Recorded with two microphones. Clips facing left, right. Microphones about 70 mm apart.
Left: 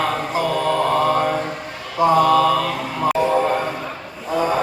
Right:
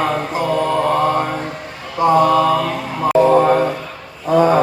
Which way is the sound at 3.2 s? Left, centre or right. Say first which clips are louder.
Right 6 dB; right.